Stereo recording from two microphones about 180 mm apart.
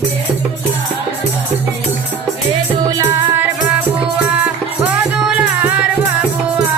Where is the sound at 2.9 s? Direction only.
20° right (ahead or behind).